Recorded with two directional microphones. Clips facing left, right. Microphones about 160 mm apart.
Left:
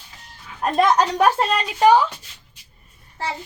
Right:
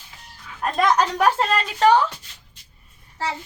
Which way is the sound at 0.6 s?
25° left (ahead or behind).